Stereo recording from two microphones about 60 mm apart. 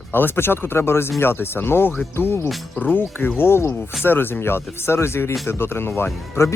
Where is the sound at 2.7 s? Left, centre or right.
Left.